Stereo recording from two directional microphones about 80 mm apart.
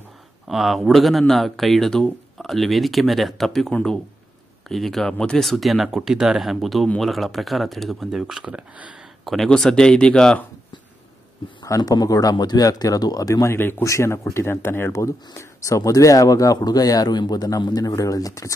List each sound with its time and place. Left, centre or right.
0.5 s speech: centre
8.5 s speech: centre
9.2 s speech: centre
11.6 s speech: left
13.6 s speech: left